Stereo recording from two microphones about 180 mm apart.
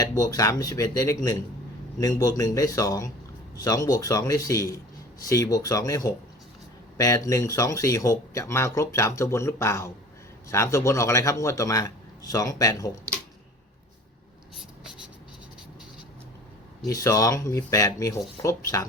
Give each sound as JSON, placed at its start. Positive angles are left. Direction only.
{"t": 0.0, "sound": "speech", "side_deg": 20}
{"t": 16.8, "sound": "speech", "side_deg": 20}